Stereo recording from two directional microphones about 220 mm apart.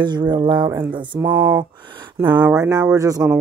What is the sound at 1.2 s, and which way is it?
Speech, 10° right (ahead or behind).